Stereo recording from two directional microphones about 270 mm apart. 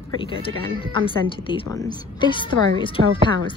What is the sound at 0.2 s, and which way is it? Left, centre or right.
Speech, centre.